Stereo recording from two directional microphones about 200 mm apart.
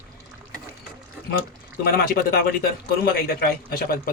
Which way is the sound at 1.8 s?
50° left (ahead or behind).